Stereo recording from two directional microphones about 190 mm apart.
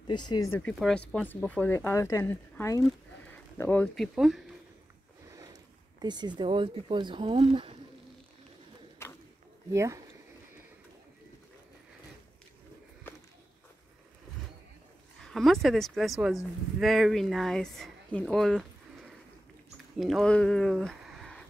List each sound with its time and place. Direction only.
0.0 s speech: 25° left (ahead or behind)
0.6 s speech: 5° left (ahead or behind)
5.3 s speech: 20° right (ahead or behind)
9.0 s a sound: 15° left (ahead or behind)
9.7 s speech: 15° right (ahead or behind)
13.0 s a sound: 10° left (ahead or behind)
15.1 s speech: centre (ahead or behind)